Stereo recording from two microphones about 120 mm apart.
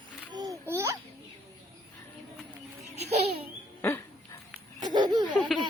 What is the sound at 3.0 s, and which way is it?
Baby laughter, 60° right (ahead or behind).